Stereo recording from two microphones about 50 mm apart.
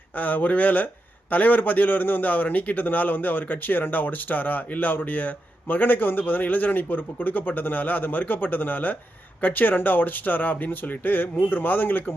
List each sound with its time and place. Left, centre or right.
0.2 s a man's voice: left